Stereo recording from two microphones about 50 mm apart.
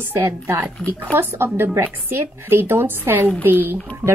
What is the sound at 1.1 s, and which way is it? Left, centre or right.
Speech, right.